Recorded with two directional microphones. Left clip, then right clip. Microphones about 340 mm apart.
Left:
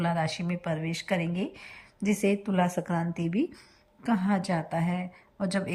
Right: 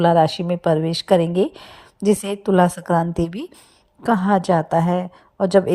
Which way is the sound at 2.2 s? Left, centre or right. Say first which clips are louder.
Right 6 dB; centre.